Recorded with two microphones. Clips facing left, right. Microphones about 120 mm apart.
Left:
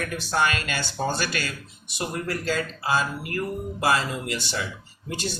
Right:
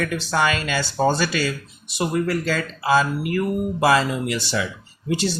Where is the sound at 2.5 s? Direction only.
90° right.